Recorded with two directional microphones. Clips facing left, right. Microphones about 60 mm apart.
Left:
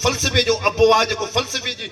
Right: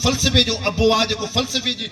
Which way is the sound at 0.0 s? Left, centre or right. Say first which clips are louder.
Even; left.